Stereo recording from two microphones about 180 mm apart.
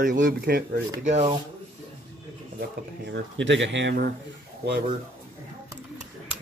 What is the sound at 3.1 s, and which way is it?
Speech, 85° right.